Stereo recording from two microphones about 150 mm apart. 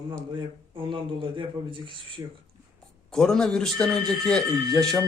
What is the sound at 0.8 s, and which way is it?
Speech, 35° right (ahead or behind).